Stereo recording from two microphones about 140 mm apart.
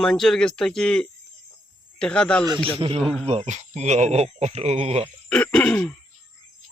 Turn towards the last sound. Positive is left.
turn(degrees=10)  # may be behind; listen again after turning